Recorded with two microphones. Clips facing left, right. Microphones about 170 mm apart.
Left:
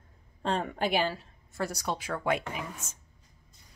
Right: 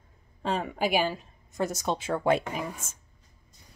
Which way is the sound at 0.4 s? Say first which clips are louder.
Right 1 dB; 5° right (ahead or behind).